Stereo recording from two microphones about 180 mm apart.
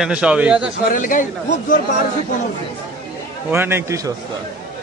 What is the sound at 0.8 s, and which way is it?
Speech, 50° left (ahead or behind).